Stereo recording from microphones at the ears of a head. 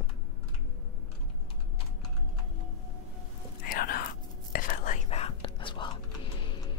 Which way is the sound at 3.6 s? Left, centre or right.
Left.